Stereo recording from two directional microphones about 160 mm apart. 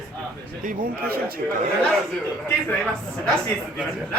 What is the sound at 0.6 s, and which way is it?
Speech, 70° right (ahead or behind).